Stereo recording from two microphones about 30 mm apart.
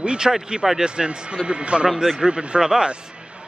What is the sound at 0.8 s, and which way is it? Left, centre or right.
A man's voice, right.